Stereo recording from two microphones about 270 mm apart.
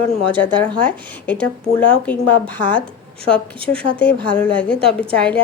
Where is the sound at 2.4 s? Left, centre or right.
Centre.